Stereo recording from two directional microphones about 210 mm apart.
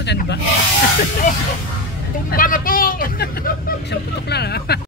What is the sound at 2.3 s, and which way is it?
Vehicle, 40° left (ahead or behind).